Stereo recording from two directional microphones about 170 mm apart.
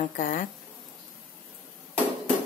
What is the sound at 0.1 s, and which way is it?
Speech, 50° left (ahead or behind).